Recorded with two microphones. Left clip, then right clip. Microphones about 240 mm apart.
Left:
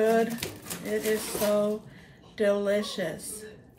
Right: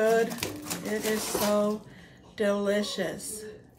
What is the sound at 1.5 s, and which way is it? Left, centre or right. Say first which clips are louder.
Speech: left 2 dB; centre.